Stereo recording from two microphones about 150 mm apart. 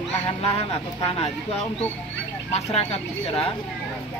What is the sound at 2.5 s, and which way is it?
Speech, 45° left (ahead or behind).